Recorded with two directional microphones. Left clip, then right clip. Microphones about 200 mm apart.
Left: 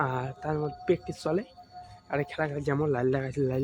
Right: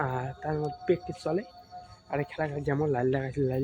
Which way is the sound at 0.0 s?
10° left (ahead or behind).